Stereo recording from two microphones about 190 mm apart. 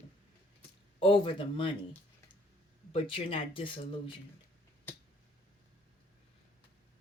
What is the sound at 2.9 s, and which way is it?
Speech, 30° left (ahead or behind).